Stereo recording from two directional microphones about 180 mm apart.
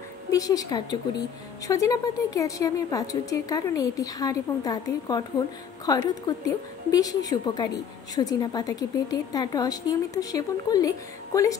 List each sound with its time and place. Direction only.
0.3 s a woman's voice: 20° left (ahead or behind)